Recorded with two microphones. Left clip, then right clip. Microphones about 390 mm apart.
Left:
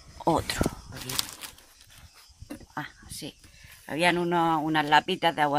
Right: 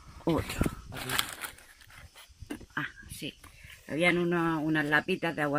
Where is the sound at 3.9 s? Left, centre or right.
Left.